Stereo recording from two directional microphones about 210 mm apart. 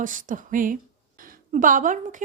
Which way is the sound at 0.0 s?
40° right (ahead or behind).